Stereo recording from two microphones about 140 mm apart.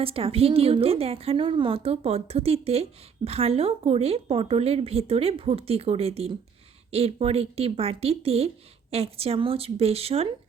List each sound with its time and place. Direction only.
0.0 s a woman's voice: 40° right (ahead or behind)